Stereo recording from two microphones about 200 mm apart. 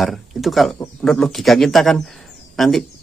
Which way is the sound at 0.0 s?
Centre (ahead or behind).